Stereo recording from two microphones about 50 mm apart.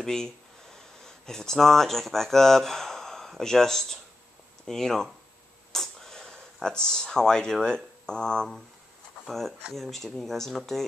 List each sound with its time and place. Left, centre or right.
0.0 s speech: centre
5.7 s a sound: centre
7.6 s speech: centre
9.2 s speech: centre